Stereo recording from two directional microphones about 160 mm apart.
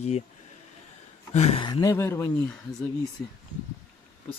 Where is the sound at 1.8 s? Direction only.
15° left (ahead or behind).